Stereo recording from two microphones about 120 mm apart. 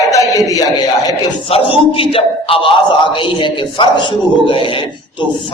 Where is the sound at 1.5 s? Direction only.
50° left (ahead or behind).